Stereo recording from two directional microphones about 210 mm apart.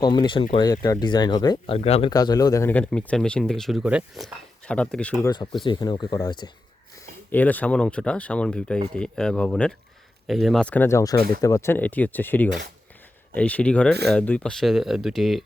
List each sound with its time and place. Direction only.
0.0 s speech: 20° left (ahead or behind); by 5.1 s 5° left (ahead or behind)
5.2 s speech: 20° left (ahead or behind)
7.3 s speech: 10° left (ahead or behind)